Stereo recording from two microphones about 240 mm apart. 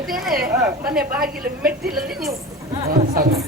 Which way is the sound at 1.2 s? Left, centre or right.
Right.